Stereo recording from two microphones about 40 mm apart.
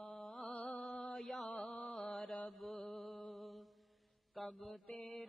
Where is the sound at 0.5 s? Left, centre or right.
Left.